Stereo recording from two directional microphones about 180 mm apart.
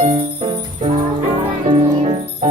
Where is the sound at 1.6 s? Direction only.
35° right (ahead or behind).